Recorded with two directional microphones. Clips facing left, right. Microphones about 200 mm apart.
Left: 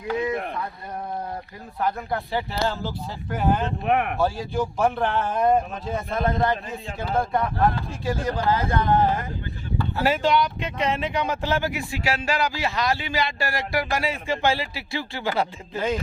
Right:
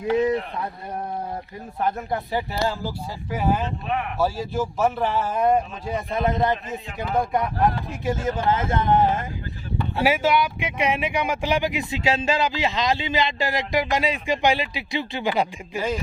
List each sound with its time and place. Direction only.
2.0 s a man's voice: 15° right (ahead or behind)
3.8 s speech: 60° left (ahead or behind)
4.2 s a man's voice: 5° right (ahead or behind); by 9.2 s 20° right (ahead or behind)
10.0 s a man's voice: 10° right (ahead or behind)